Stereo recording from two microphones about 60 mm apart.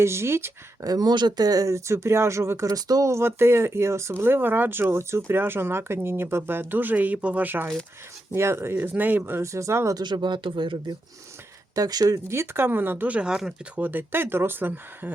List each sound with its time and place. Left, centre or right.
0.0 s speech: right
0.8 s speech: right
2.6 s speech: right
3.1 s speech: right
8.4 s speech: right
8.7 s speech: right
9.4 s speech: right
11.7 s speech: right
12.3 s speech: right
13.1 s speech: centre
13.7 s speech: right